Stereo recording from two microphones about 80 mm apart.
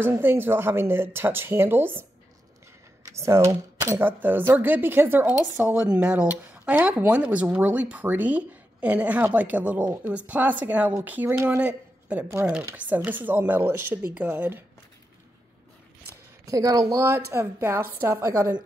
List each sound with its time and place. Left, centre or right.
0.0 s speech: right
4.2 s a woman's voice: right
12.3 s a woman's voice: right
16.4 s speech: right
17.0 s a woman's voice: right